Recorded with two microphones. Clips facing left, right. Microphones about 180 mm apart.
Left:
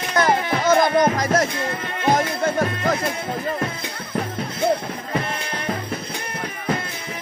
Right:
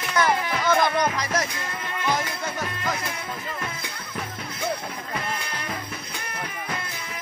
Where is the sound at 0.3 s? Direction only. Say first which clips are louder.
Left 5 dB; 30° left (ahead or behind).